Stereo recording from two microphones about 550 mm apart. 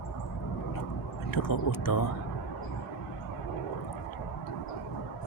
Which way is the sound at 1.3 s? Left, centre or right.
Left.